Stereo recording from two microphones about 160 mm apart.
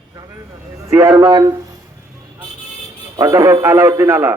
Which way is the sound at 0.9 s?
20° right (ahead or behind).